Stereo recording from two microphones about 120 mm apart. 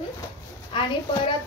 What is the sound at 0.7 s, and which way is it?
Speech, 45° left (ahead or behind).